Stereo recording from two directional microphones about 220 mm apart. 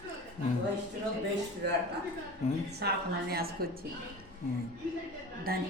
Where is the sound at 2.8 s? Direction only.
45° right (ahead or behind).